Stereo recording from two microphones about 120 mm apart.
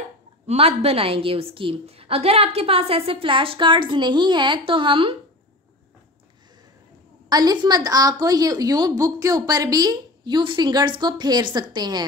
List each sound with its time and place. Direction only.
0.5 s a woman's voice: 55° right (ahead or behind)
7.2 s a woman's voice: 35° right (ahead or behind)